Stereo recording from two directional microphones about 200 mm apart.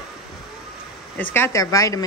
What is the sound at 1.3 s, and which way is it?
Speech, 15° left (ahead or behind).